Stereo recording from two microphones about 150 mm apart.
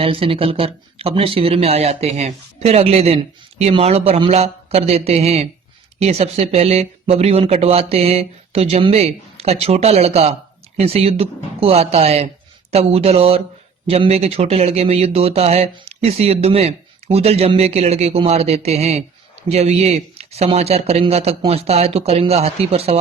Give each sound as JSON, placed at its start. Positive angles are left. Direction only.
{"t": 0.0, "sound": "speech", "side_deg": -40}